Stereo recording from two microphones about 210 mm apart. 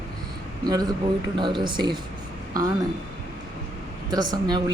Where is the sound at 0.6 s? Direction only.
20° right (ahead or behind).